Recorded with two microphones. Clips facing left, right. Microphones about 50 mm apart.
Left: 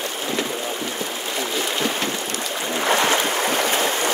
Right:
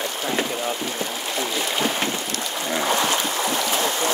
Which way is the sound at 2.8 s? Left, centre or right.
Left.